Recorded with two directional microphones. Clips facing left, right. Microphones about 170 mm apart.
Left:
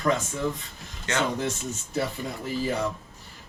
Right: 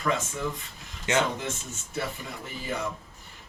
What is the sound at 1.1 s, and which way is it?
Speech, 20° right (ahead or behind).